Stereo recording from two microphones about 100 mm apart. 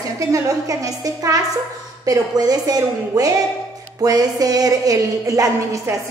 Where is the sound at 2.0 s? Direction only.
40° right (ahead or behind).